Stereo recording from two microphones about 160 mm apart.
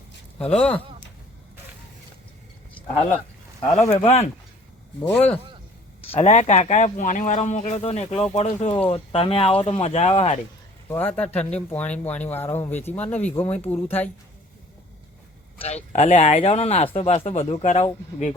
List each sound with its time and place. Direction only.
0.3 s speech: 5° left (ahead or behind)
3.8 s speech: 45° left (ahead or behind)
5.0 s speech: 10° left (ahead or behind)
6.1 s speech: 45° left (ahead or behind)
10.8 s speech: 10° left (ahead or behind)
15.6 s speech: 45° left (ahead or behind)